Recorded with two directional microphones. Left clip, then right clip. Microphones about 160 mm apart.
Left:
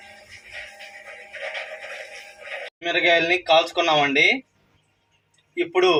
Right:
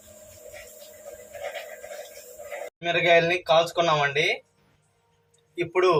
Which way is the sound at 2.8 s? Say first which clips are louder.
Left 1 dB; 35° left (ahead or behind).